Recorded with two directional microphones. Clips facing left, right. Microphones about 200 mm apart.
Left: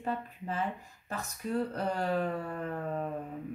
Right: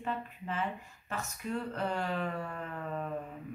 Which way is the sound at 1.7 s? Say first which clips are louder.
Left 3 dB; 35° left (ahead or behind).